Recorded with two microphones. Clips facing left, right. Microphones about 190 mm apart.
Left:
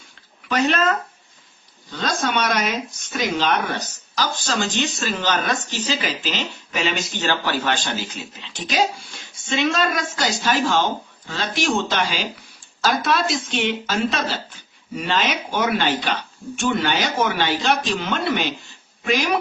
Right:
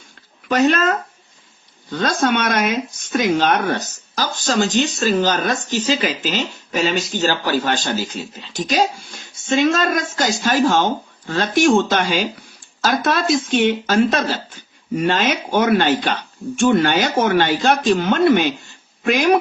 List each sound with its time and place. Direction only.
0.4 s a woman's voice: 45° right (ahead or behind)